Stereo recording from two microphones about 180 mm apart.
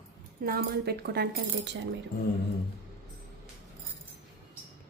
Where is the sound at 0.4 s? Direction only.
60° right (ahead or behind).